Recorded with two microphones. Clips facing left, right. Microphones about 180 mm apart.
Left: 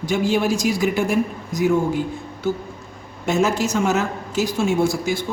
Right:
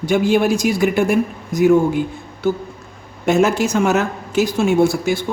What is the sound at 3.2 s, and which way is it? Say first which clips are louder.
Speech: right 4 dB; 60° right (ahead or behind).